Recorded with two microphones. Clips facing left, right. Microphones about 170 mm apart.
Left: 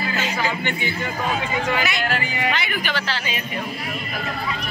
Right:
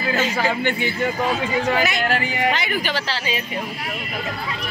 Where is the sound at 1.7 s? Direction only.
40° right (ahead or behind).